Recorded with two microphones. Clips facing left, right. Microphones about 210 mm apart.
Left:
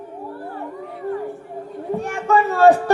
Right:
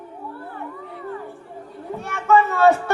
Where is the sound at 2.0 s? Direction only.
35° left (ahead or behind).